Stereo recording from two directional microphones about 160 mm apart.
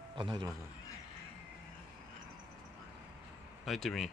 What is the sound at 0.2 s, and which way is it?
Speech, 25° right (ahead or behind).